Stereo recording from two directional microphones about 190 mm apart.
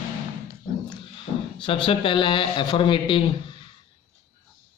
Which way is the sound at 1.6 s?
30° left (ahead or behind).